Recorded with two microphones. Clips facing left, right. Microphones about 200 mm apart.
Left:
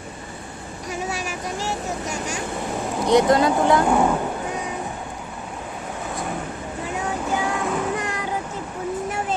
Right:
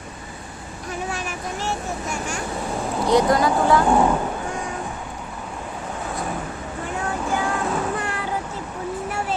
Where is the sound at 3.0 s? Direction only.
25° left (ahead or behind).